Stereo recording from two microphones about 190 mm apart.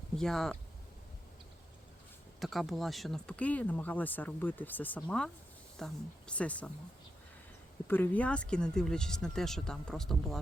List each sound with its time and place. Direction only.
0.2 s speech: centre (ahead or behind)
2.4 s speech: centre (ahead or behind)
7.9 s speech: 10° left (ahead or behind)